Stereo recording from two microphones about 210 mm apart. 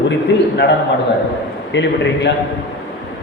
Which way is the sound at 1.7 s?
55° left (ahead or behind).